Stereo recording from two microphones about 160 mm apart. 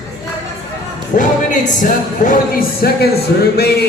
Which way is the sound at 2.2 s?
70° left (ahead or behind).